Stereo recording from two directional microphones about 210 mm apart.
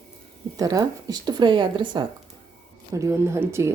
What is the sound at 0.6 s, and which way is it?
A woman's voice, 15° right (ahead or behind).